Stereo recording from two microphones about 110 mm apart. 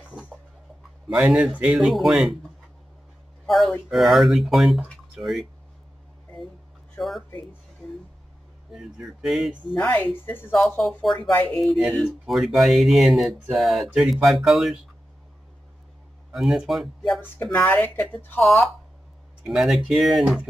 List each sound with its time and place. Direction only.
0.0 s a sound: 10° right (ahead or behind)
1.1 s speech: 5° right (ahead or behind)
3.4 s speech: centre (ahead or behind)
7.0 s speech: centre (ahead or behind)
8.7 s speech: 5° right (ahead or behind)
9.8 s speech: 15° left (ahead or behind)
10.8 s speech: centre (ahead or behind)
11.9 s speech: 10° left (ahead or behind)
12.3 s speech: centre (ahead or behind)
16.3 s speech: 5° right (ahead or behind)
17.4 s speech: 15° left (ahead or behind)
18.4 s speech: centre (ahead or behind)